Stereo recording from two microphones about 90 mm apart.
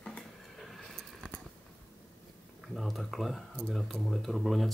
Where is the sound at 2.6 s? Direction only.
Centre (ahead or behind).